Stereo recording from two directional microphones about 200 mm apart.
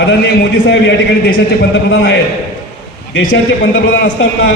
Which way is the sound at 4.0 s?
65° left (ahead or behind).